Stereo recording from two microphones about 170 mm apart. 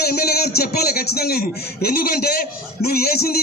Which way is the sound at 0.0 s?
65° left (ahead or behind).